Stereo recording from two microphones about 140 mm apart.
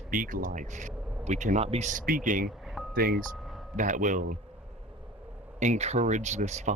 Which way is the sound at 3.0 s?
90° right.